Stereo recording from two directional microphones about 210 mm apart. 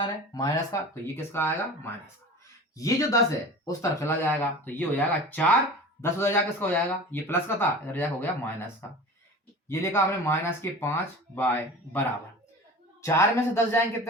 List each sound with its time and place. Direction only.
0.0 s speech: 15° left (ahead or behind)